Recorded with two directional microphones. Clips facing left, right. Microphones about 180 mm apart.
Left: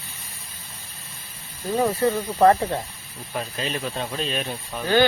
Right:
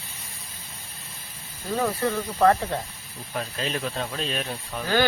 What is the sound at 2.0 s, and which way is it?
Speech, 25° left (ahead or behind).